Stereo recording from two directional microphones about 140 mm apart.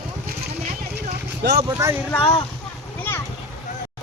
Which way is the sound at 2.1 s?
40° left (ahead or behind).